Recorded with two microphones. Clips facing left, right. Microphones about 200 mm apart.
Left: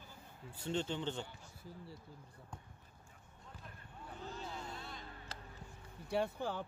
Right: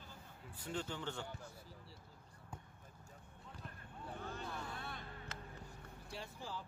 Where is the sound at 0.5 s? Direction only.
25° left (ahead or behind).